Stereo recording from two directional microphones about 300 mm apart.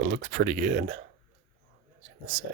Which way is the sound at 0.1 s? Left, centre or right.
Right.